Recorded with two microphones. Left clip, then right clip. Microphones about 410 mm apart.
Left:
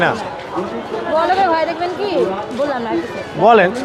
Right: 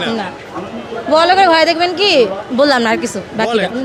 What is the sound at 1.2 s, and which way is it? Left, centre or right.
A man's voice, right.